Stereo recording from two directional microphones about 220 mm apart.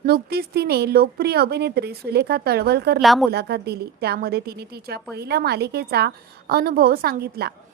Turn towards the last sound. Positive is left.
turn(degrees=-45)  # may be behind; listen again after turning